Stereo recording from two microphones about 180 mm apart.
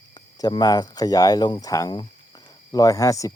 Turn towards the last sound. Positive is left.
turn(degrees=20)  # may be behind; listen again after turning